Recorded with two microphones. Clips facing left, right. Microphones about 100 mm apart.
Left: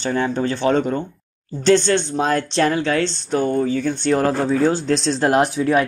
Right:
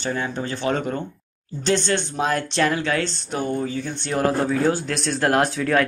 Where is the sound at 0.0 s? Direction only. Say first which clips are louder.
Left 6 dB; 35° left (ahead or behind).